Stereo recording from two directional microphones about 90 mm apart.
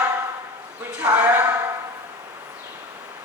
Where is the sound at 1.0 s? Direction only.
20° right (ahead or behind).